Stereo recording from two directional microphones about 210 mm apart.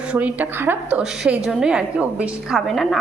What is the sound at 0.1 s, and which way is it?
A woman's voice, 5° right (ahead or behind).